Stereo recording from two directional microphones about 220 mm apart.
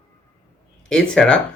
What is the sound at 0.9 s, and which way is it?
Speech, 5° left (ahead or behind).